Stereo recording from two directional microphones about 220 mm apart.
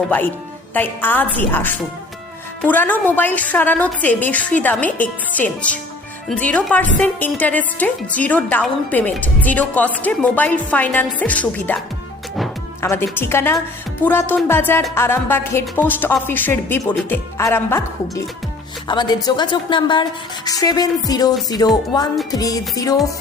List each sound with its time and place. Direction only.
0.7 s a woman's voice: 10° left (ahead or behind)
12.8 s a woman's voice: 10° left (ahead or behind)